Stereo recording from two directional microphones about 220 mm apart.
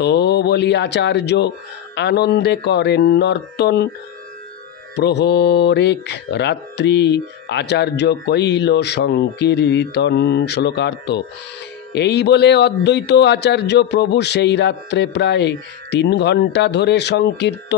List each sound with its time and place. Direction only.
0.0 s speech: 50° left (ahead or behind)
4.9 s speech: 50° left (ahead or behind)